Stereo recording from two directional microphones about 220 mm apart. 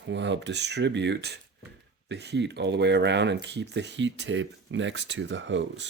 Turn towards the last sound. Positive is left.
turn(degrees=-55)  # may be behind; listen again after turning